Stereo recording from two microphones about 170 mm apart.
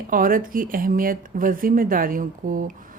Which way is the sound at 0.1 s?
55° right (ahead or behind).